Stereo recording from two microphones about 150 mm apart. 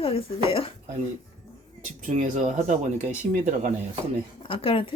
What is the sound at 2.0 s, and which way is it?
Speech, 55° right (ahead or behind).